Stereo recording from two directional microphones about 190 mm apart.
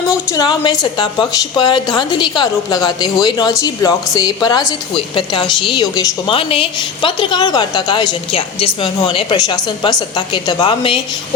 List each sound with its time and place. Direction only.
0.1 s a woman's voice: 20° left (ahead or behind)